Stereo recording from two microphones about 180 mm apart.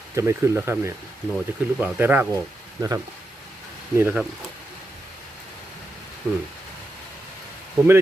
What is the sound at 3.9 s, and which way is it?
Speech, 10° right (ahead or behind).